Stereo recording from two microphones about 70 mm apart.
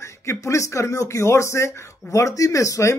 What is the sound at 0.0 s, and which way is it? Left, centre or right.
Speech, left.